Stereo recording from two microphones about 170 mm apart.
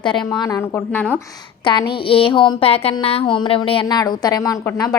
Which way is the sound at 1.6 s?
30° left (ahead or behind).